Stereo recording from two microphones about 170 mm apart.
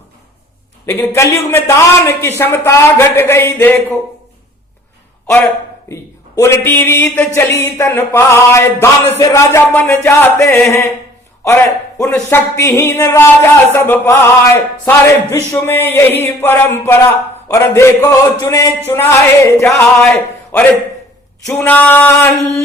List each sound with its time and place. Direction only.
0.9 s a man's voice: 15° left (ahead or behind)
5.9 s a man's voice: 15° left (ahead or behind)